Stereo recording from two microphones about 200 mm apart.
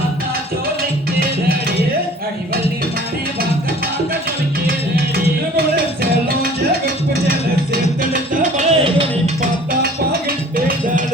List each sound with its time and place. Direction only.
6.0 s music: 50° right (ahead or behind)
8.4 s music: 35° right (ahead or behind)